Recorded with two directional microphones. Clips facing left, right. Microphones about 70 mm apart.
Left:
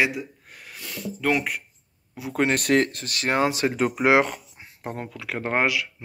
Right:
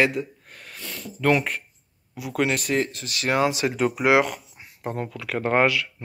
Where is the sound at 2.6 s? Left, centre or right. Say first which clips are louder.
Left 4 dB; left.